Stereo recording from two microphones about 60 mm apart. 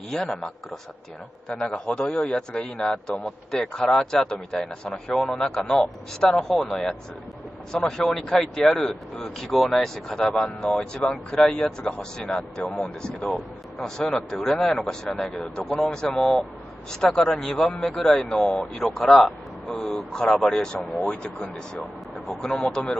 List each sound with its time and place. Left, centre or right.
0.2 s a man's voice: centre
21.0 s a man's voice: left